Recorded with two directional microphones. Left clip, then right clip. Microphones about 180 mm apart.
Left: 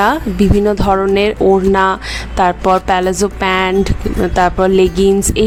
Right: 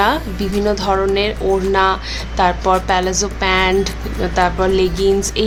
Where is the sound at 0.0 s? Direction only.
40° left (ahead or behind).